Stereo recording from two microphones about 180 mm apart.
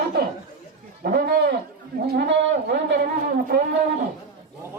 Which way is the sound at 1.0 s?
60° right (ahead or behind).